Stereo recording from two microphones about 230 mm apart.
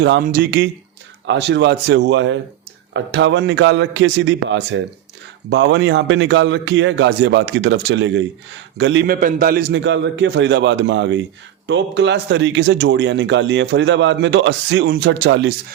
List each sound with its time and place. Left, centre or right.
0.0 s speech: right